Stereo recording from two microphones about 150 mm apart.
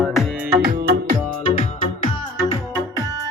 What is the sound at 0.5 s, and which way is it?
Music, 90° right.